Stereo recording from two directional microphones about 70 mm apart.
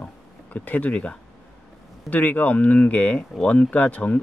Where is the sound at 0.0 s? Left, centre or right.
Left.